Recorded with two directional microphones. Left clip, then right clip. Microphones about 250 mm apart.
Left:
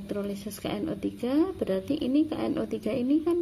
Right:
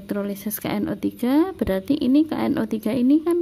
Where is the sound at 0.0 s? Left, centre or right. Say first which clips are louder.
Right 5 dB; right.